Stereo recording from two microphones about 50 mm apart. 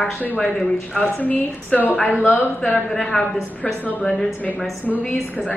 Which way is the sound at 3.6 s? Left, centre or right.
Left.